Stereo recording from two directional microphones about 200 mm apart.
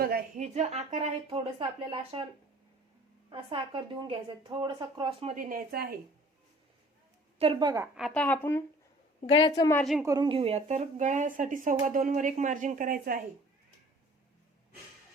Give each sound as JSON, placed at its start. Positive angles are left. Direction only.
{"t": 0.0, "sound": "speech", "side_deg": -40}
{"t": 3.2, "sound": "speech", "side_deg": -25}
{"t": 7.3, "sound": "speech", "side_deg": -25}
{"t": 7.9, "sound": "a woman's voice", "side_deg": 0}
{"t": 10.0, "sound": "speech", "side_deg": -20}